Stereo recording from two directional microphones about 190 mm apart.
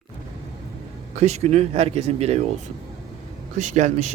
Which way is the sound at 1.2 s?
35° right (ahead or behind).